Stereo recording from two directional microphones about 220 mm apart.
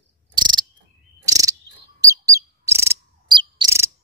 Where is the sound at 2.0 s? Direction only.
15° right (ahead or behind).